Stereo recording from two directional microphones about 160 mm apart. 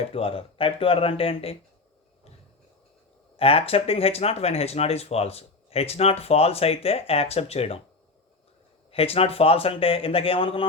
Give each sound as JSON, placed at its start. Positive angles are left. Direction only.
{"t": 0.1, "sound": "speech", "side_deg": 35}
{"t": 3.3, "sound": "speech", "side_deg": 35}
{"t": 8.9, "sound": "speech", "side_deg": 35}